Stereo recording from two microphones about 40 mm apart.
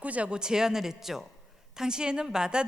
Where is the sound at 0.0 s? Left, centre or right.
Right.